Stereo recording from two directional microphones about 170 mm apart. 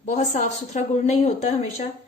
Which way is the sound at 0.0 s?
45° left (ahead or behind).